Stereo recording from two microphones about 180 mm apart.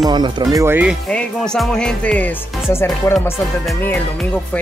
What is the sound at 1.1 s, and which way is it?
Speech, 5° left (ahead or behind).